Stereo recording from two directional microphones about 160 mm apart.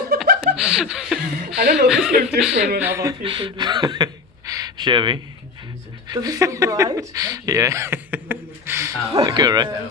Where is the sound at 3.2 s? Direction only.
30° right (ahead or behind).